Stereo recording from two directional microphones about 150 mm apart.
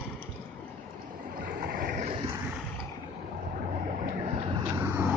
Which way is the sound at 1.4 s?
70° right (ahead or behind).